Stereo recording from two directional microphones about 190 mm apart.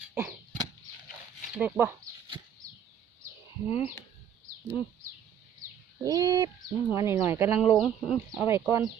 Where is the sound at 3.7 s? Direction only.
35° left (ahead or behind).